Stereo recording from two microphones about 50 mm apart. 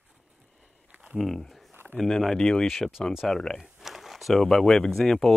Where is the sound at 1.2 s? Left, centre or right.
Centre.